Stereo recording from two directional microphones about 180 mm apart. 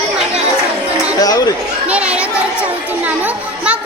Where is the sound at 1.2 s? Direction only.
20° left (ahead or behind).